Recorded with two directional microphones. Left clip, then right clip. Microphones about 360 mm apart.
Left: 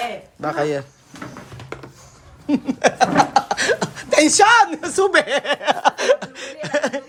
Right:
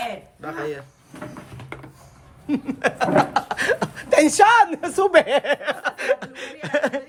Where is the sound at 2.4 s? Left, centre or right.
Centre.